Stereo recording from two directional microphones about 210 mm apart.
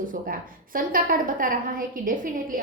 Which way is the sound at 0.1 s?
40° right (ahead or behind).